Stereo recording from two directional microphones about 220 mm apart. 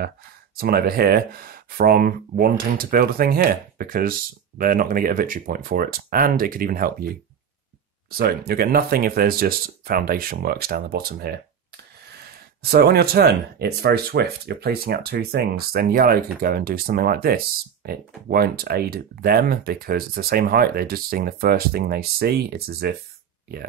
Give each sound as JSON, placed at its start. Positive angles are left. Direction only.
{"t": 0.6, "sound": "speech", "side_deg": -45}
{"t": 12.6, "sound": "speech", "side_deg": -45}